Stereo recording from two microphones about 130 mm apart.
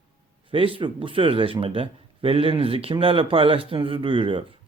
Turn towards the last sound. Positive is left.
turn(degrees=-40)  # may be behind; listen again after turning